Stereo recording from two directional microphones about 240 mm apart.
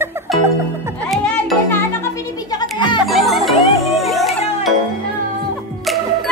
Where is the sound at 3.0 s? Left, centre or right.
Centre.